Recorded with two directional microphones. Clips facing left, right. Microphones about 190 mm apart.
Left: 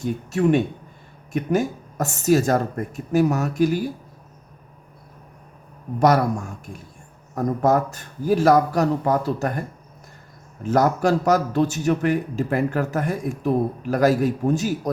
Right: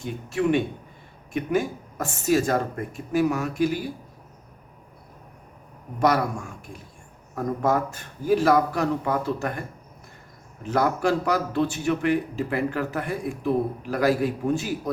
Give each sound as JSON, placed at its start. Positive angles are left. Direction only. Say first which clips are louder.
{"t": 0.0, "sound": "a man's voice", "louder": "left 4 dB", "side_deg": 45}
{"t": 6.0, "sound": "a man's voice", "louder": "left 4 dB", "side_deg": 40}